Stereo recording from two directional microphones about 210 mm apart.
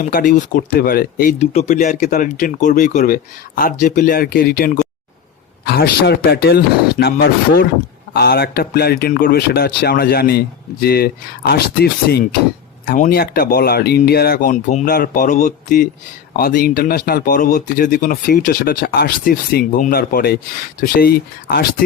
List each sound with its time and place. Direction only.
0.0 s speech: 40° left (ahead or behind)
1.4 s speech: 30° left (ahead or behind)